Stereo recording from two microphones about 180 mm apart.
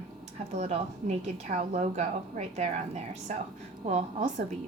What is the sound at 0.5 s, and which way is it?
A woman's voice, 35° right (ahead or behind).